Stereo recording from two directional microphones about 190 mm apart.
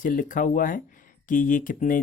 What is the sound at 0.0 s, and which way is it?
Speech, 45° left (ahead or behind).